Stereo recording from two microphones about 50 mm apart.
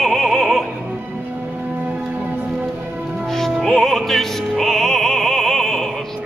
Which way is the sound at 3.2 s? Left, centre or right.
Centre.